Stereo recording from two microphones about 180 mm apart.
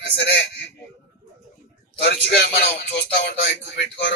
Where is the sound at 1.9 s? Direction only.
65° left (ahead or behind).